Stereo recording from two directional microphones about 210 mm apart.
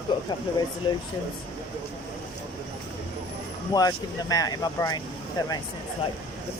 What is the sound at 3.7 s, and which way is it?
Speech, 15° left (ahead or behind).